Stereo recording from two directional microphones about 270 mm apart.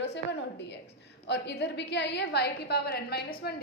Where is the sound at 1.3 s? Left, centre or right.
Left.